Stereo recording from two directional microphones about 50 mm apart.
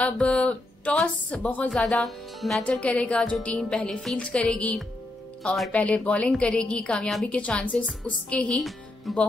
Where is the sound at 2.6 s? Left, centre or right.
Left.